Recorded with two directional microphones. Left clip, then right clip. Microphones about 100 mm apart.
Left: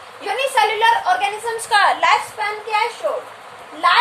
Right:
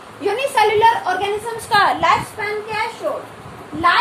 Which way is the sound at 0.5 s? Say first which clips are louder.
Right 2 dB; 20° right (ahead or behind).